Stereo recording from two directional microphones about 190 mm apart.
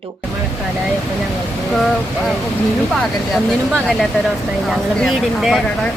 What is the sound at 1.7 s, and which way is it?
Speech, centre (ahead or behind).